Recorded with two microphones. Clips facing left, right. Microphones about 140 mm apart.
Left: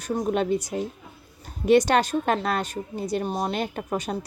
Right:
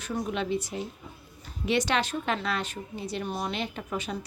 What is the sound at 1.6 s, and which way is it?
A woman's voice, 45° left (ahead or behind).